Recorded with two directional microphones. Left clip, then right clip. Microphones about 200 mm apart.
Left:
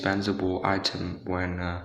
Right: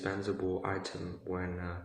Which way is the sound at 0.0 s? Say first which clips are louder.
Left 8 dB; 40° left (ahead or behind).